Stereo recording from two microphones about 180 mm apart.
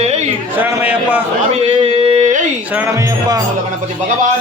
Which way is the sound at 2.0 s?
35° right (ahead or behind).